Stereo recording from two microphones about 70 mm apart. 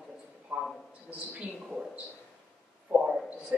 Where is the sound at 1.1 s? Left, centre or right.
Centre.